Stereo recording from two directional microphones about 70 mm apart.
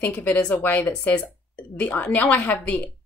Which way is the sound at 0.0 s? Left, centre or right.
Left.